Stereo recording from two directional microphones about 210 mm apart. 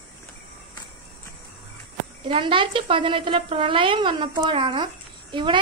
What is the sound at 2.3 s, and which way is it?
A child's voice, 25° right (ahead or behind).